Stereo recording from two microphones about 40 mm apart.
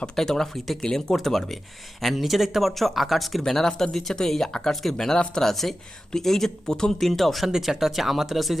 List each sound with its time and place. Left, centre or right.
0.2 s speech: centre
0.8 s speech: centre
1.2 s speech: centre
7.0 s speech: centre
7.4 s speech: centre